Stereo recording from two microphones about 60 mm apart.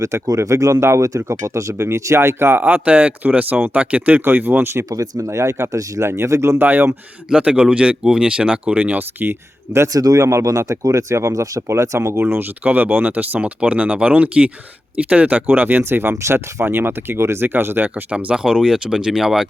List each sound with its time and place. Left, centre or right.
0.0 s speech: right
2.6 s speech: right
4.2 s speech: right
4.9 s speech: right
6.6 s speech: right
7.3 s speech: centre; by 9.8 s right
9.8 s speech: right
12.2 s speech: right
17.8 s speech: right; by 19.5 s centre